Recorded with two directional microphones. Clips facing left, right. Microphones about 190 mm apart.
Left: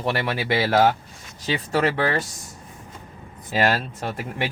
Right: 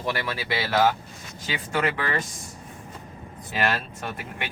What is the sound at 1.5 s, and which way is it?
Speech, 35° left (ahead or behind).